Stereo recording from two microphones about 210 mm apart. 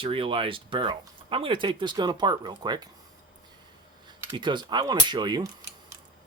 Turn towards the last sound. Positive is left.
turn(degrees=-20)  # may be behind; listen again after turning